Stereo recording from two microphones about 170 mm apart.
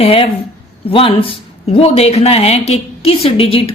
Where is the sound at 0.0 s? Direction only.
35° left (ahead or behind).